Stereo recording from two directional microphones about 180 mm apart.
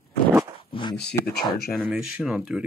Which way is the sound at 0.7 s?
25° left (ahead or behind).